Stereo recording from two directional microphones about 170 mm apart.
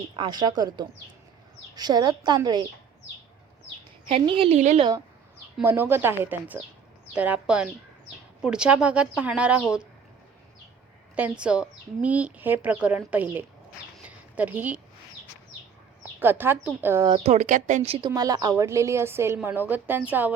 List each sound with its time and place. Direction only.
0.2 s a woman's voice: 25° right (ahead or behind)
4.1 s speech: 35° right (ahead or behind)
5.6 s a woman's voice: 10° right (ahead or behind)
11.1 s a woman's voice: 5° right (ahead or behind)
16.2 s a woman's voice: 10° right (ahead or behind)
17.1 s speech: 40° right (ahead or behind)
18.1 s a woman's voice: 20° right (ahead or behind)